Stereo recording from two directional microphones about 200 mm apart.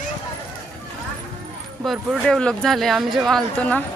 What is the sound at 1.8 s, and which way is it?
Speech, centre (ahead or behind).